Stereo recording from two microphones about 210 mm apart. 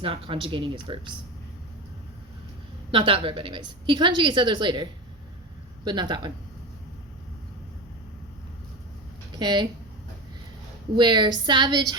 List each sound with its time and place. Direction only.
0.0 s a woman's voice: 25° right (ahead or behind)
2.9 s a woman's voice: 25° right (ahead or behind)
9.3 s speech: 20° right (ahead or behind)
10.9 s a woman's voice: 20° right (ahead or behind)